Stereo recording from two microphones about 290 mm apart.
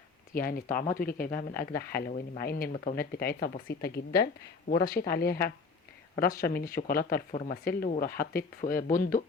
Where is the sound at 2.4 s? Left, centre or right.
Left.